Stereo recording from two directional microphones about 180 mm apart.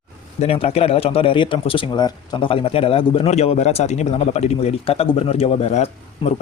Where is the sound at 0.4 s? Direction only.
35° left (ahead or behind).